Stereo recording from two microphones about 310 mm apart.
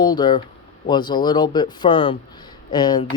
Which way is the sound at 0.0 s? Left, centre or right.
Centre.